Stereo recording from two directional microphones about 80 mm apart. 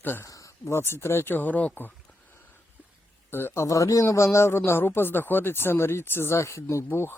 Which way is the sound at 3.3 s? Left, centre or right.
Left.